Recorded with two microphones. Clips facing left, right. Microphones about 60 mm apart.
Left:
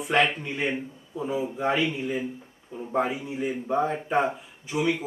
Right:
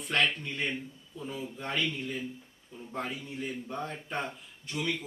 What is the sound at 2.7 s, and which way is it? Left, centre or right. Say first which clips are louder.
Speech: left 12 dB; left.